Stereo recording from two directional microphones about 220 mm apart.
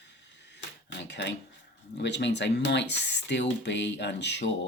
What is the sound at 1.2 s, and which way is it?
Speech, 50° left (ahead or behind).